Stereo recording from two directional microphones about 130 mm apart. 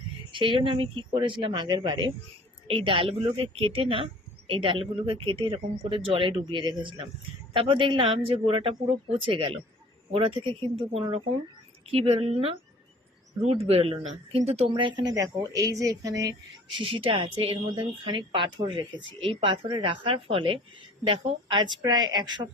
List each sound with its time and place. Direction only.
0.3 s a woman's voice: 40° right (ahead or behind)
14.7 s speech: 40° right (ahead or behind)
16.8 s a woman's voice: 45° right (ahead or behind)